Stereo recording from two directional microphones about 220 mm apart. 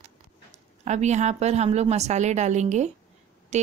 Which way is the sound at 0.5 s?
30° right (ahead or behind).